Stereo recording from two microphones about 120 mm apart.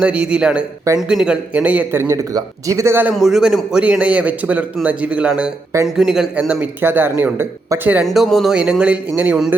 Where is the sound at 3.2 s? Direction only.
5° right (ahead or behind).